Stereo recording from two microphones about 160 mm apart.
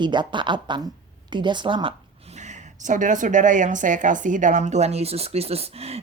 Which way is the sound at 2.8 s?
55° right (ahead or behind).